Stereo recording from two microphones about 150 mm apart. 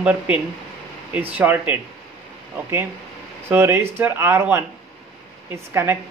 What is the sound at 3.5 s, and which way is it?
Speech, 15° right (ahead or behind).